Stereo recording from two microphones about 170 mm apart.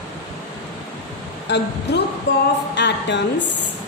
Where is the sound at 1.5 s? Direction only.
90° left.